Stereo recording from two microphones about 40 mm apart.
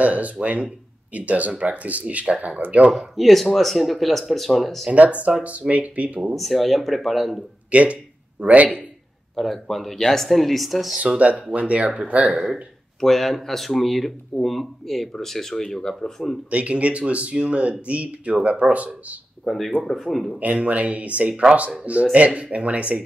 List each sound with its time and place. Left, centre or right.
0.0 s speech: right
2.9 s speech: centre
4.9 s speech: right
6.3 s speech: centre
7.7 s speech: right
9.3 s speech: centre
11.5 s speech: right
13.0 s speech: centre
16.4 s speech: right
19.4 s speech: centre
20.3 s speech: right